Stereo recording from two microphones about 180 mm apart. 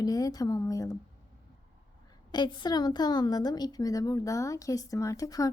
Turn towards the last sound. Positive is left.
turn(degrees=20)  # may be behind; listen again after turning